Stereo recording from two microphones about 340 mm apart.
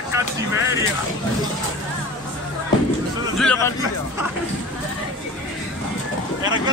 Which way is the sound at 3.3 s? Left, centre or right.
Centre.